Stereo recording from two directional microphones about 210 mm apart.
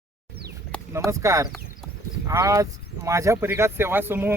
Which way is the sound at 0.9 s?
15° right (ahead or behind).